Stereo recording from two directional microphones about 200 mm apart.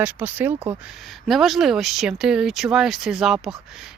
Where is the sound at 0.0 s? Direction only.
10° right (ahead or behind).